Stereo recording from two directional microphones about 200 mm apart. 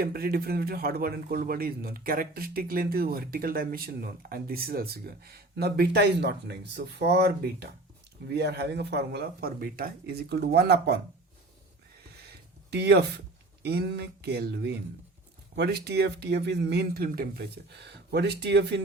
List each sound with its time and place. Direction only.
0.0 s a man's voice: 50° right (ahead or behind)
12.7 s speech: 55° right (ahead or behind)